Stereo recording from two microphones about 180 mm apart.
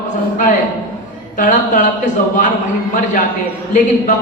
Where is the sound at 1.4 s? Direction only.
45° left (ahead or behind).